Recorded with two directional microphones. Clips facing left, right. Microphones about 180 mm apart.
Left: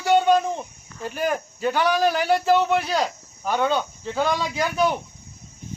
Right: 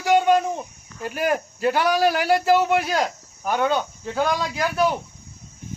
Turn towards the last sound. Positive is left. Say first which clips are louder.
# even
turn(degrees=-5)  # may be behind; listen again after turning